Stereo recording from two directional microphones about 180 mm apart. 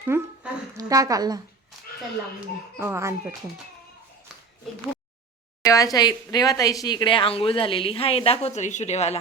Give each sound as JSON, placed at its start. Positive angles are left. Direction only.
{"t": 0.0, "sound": "a woman's voice", "side_deg": -15}
{"t": 2.7, "sound": "speech", "side_deg": -15}
{"t": 4.3, "sound": "a sound", "side_deg": 0}
{"t": 5.6, "sound": "speech", "side_deg": 20}